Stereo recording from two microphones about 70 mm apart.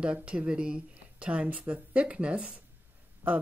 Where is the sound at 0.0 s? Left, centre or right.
Centre.